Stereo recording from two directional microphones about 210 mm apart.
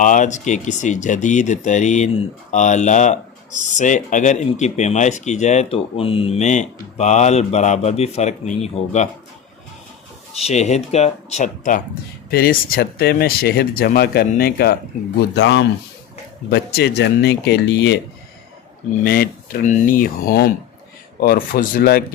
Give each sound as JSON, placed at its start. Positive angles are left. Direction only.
{"t": 0.0, "sound": "speech", "side_deg": 35}
{"t": 10.4, "sound": "speech", "side_deg": 30}
{"t": 15.4, "sound": "speech", "side_deg": 55}
{"t": 19.0, "sound": "speech", "side_deg": 45}